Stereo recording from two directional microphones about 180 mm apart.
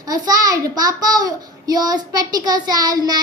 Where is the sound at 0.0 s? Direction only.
20° right (ahead or behind).